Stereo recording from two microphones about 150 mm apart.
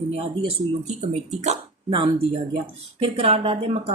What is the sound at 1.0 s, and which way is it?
Speech, 45° right (ahead or behind).